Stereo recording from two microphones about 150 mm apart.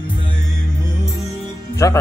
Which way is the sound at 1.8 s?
20° left (ahead or behind).